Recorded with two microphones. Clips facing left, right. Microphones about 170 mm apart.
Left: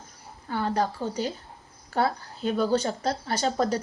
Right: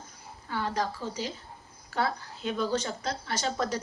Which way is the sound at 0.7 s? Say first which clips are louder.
Left 5 dB; 35° left (ahead or behind).